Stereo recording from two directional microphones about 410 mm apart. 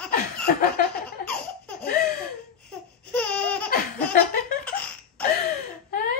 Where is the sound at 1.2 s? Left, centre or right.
Centre.